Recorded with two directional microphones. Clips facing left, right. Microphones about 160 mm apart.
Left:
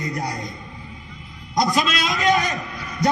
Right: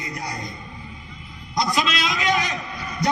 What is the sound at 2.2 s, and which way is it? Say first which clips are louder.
Speech: left 5 dB; 45° left (ahead or behind).